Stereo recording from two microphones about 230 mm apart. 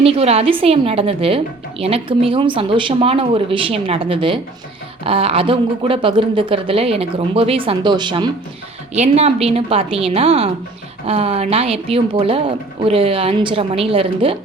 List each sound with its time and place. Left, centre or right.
0.0 s speech: right